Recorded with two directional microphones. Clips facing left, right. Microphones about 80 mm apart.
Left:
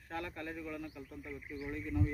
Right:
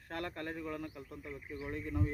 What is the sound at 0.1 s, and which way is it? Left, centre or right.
Speech, right.